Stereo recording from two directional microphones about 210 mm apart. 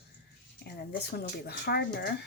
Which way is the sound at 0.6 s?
50° left (ahead or behind).